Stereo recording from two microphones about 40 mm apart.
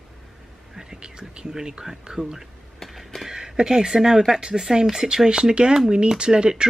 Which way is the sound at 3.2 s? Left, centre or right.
Centre.